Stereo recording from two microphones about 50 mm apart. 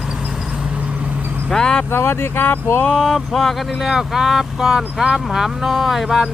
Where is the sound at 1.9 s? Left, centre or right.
Left.